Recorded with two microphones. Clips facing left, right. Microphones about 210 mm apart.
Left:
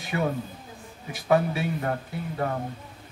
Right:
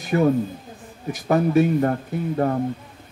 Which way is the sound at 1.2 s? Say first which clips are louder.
Right 6 dB; 45° right (ahead or behind).